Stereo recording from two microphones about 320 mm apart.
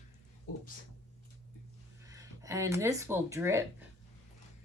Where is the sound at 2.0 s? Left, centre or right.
Centre.